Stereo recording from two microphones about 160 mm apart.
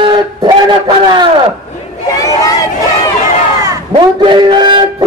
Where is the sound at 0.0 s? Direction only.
30° right (ahead or behind).